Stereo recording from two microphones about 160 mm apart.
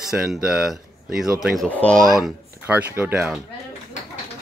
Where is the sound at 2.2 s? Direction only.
10° right (ahead or behind).